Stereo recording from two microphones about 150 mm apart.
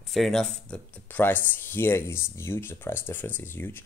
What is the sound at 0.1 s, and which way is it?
Speech, centre (ahead or behind).